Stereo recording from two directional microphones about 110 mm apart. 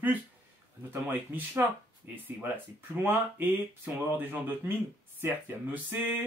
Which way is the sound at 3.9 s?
15° right (ahead or behind).